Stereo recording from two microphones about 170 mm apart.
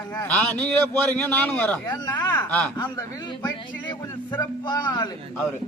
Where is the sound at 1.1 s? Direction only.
5° left (ahead or behind).